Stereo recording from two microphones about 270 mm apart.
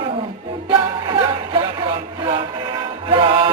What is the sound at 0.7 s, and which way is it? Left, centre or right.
Music, centre.